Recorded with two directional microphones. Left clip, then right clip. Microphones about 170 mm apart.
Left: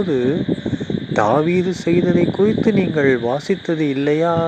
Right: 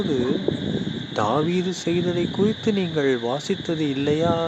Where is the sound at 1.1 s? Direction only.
25° left (ahead or behind).